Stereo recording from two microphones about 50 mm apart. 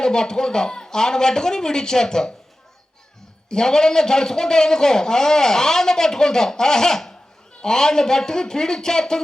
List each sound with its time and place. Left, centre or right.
0.0 s a man's voice: centre
3.5 s a man's voice: centre